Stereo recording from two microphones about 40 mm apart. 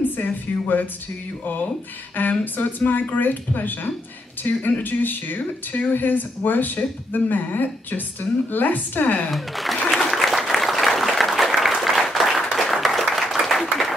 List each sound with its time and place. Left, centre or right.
0.2 s speech: left
9.3 s speech: centre
10.1 s applause: centre